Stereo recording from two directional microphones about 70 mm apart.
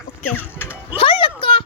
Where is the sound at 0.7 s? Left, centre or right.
Right.